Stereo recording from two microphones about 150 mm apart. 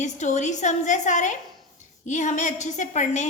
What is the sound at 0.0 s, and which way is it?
A woman's voice, 50° left (ahead or behind).